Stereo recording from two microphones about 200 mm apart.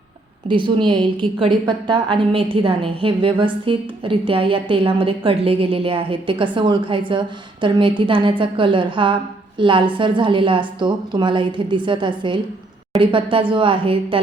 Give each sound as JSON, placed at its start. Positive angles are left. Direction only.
{"t": 0.4, "sound": "a woman's voice", "side_deg": -25}